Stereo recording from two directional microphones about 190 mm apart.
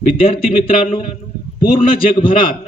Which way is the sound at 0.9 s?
35° left (ahead or behind).